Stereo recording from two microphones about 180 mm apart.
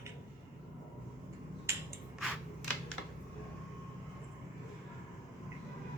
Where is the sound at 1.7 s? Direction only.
15° right (ahead or behind).